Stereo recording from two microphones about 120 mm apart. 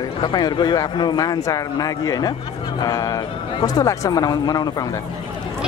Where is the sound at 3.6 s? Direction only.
30° left (ahead or behind).